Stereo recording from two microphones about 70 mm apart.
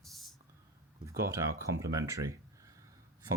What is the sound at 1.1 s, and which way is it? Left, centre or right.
Speech, right.